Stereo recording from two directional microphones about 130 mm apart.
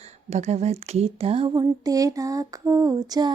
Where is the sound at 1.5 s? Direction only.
30° right (ahead or behind).